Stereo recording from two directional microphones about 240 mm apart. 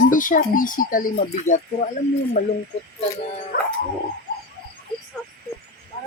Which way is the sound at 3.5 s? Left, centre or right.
Left.